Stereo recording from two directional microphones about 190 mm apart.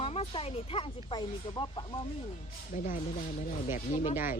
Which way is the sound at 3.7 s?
40° left (ahead or behind).